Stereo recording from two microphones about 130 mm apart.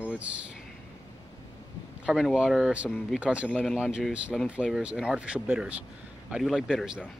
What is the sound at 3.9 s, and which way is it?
Speech, 5° right (ahead or behind).